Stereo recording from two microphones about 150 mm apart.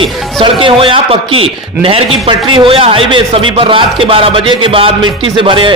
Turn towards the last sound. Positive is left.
turn(degrees=-35)  # may be behind; listen again after turning